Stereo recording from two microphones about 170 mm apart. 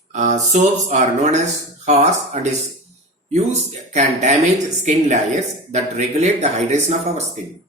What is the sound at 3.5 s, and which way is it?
Speech, 45° right (ahead or behind).